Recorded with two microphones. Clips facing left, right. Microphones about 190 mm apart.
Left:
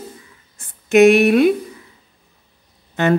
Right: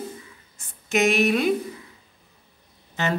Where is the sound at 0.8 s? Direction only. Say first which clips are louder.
Left 10 dB; 60° left (ahead or behind).